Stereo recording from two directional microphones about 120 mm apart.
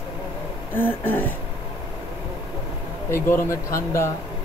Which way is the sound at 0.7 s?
15° left (ahead or behind).